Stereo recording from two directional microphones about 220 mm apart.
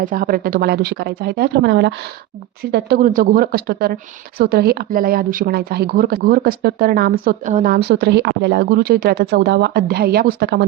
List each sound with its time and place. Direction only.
0.0 s speech: 40° right (ahead or behind)